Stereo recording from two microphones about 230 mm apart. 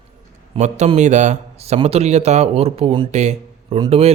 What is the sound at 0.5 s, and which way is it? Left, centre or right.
A man's voice, right.